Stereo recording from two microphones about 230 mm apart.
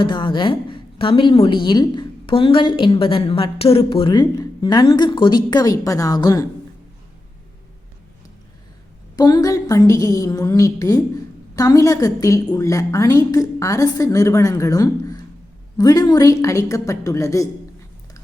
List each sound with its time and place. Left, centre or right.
0.0 s a woman's voice: left
9.1 s a woman's voice: centre